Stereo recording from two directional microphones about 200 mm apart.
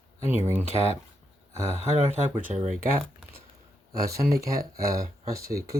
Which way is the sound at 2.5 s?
40° right (ahead or behind).